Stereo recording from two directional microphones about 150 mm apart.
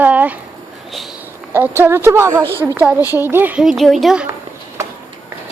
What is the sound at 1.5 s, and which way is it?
Speech, 15° right (ahead or behind).